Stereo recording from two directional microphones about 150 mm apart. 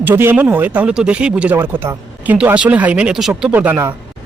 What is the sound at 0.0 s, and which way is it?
Speech, 15° right (ahead or behind).